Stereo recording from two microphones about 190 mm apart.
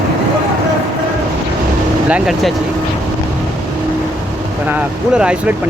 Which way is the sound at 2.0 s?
5° right (ahead or behind).